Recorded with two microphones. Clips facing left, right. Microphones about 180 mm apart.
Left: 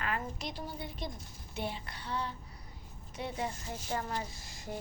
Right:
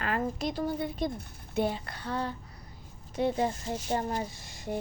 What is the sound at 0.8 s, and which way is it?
A woman's voice, 50° right (ahead or behind).